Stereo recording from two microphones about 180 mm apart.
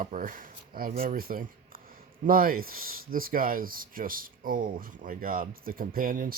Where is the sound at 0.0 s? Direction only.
50° right (ahead or behind).